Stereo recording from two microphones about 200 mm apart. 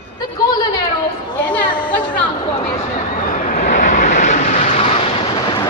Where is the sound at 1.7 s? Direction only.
25° left (ahead or behind).